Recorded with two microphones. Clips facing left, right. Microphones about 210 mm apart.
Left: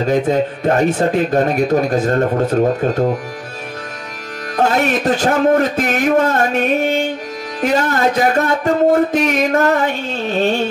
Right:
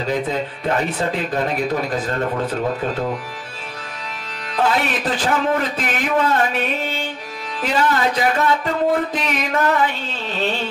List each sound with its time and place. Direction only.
0.0 s music: 45° left (ahead or behind)
4.6 s music: 45° left (ahead or behind)